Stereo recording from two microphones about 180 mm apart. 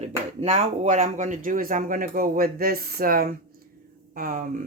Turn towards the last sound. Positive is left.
turn(degrees=-50)  # may be behind; listen again after turning